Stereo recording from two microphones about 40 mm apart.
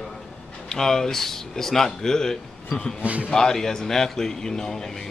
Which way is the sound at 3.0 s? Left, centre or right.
Right.